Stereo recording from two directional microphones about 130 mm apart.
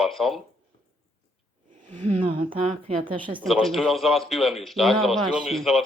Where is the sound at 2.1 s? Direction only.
40° right (ahead or behind).